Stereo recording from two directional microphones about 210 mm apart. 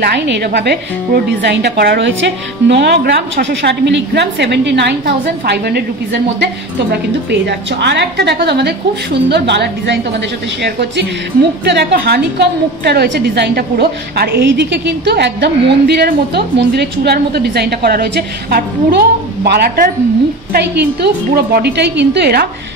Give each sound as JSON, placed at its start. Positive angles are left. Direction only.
{"t": 0.0, "sound": "a woman's voice", "side_deg": -50}